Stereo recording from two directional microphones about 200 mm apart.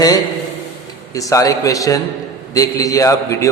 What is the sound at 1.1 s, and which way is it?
A man's voice, 15° left (ahead or behind).